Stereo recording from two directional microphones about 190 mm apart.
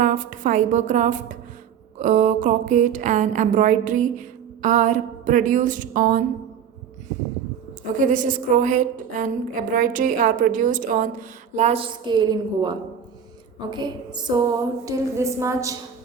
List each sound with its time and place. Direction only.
0.0 s a sound: 45° right (ahead or behind)
7.9 s a woman's voice: 45° right (ahead or behind)
11.5 s a woman's voice: 35° right (ahead or behind); by 15.7 s 15° right (ahead or behind)